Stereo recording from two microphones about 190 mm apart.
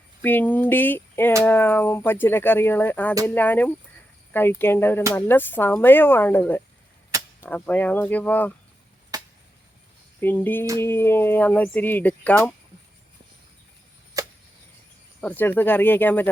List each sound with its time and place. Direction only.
0.2 s speech: 10° left (ahead or behind)
9.1 s chop: 20° right (ahead or behind)
10.2 s speech: 10° left (ahead or behind)
14.2 s a sound: 20° right (ahead or behind)
15.2 s speech: 10° left (ahead or behind)